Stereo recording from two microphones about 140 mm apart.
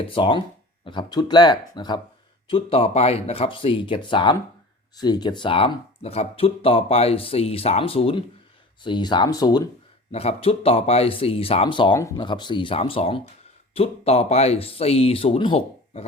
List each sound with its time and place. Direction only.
0.1 s speech: 35° left (ahead or behind)
8.8 s speech: 30° left (ahead or behind)
10.1 s speech: 45° left (ahead or behind)
11.9 s speech: 20° left (ahead or behind)
12.2 s speech: 35° left (ahead or behind)